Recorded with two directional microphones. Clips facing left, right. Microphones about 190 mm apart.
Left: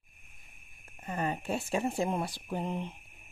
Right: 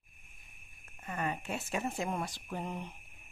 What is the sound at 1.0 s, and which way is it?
Speech, 30° left (ahead or behind).